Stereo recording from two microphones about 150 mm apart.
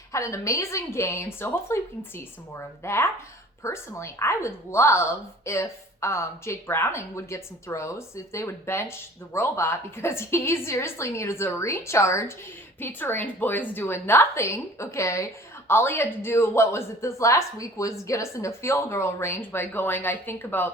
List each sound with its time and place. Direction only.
0.1 s a woman's voice: 20° left (ahead or behind)